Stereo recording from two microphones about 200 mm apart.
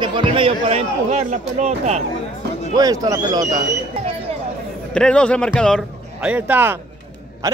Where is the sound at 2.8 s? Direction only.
20° right (ahead or behind).